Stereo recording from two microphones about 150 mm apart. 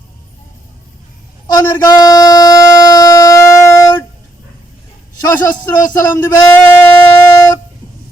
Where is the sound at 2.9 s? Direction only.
20° left (ahead or behind).